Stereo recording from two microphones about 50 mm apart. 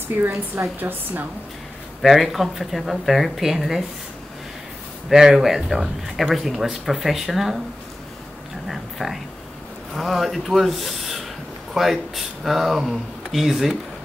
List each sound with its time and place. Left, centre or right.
0.7 s a woman's voice: right
2.0 s speech: centre
5.1 s speech: centre
8.6 s a sound: centre
9.9 s speech: centre